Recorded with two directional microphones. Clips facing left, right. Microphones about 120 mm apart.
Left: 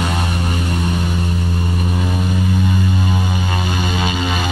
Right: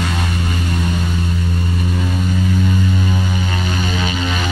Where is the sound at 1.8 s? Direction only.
20° left (ahead or behind).